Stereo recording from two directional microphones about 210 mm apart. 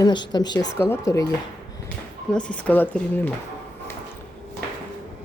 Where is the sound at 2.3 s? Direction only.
5° left (ahead or behind).